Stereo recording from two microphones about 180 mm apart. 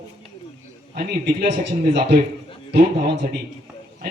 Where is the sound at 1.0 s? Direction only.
55° right (ahead or behind).